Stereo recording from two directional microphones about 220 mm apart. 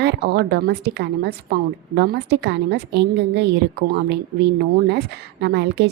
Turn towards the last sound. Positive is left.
turn(degrees=-50)  # may be behind; listen again after turning